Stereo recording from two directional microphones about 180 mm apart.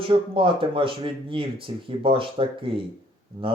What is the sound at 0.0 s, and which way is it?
Speech, 30° right (ahead or behind).